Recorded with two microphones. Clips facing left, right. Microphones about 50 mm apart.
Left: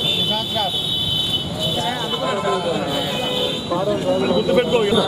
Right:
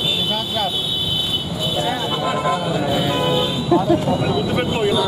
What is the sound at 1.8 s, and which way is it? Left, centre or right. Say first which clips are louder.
Speech: right 1 dB; centre.